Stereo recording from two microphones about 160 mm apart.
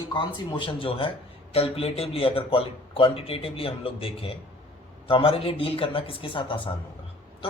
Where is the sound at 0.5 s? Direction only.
30° left (ahead or behind).